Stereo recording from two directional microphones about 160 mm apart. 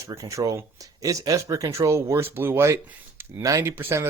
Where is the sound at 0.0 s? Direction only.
20° right (ahead or behind).